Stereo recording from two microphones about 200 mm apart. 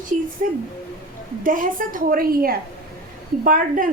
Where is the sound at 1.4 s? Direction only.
45° right (ahead or behind).